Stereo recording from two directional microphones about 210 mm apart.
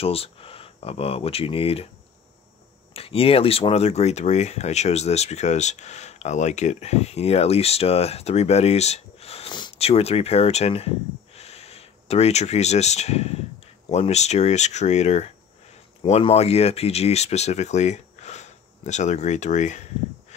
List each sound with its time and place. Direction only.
0.0 s speech: 25° left (ahead or behind)
2.9 s speech: 25° left (ahead or behind)